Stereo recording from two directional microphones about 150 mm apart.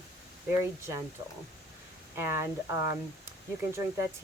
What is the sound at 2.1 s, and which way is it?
Speech, 15° right (ahead or behind).